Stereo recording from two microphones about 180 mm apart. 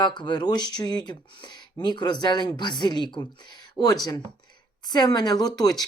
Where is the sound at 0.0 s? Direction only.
25° left (ahead or behind).